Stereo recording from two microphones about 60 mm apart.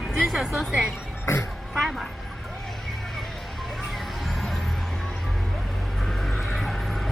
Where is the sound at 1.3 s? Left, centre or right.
Left.